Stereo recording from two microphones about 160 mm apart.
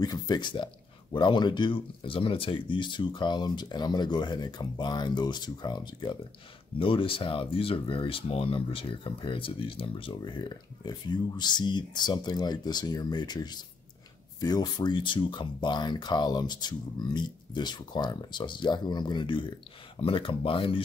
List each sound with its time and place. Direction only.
0.0 s speech: 25° left (ahead or behind)